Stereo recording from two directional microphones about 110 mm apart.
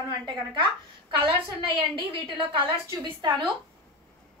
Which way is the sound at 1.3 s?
45° right (ahead or behind).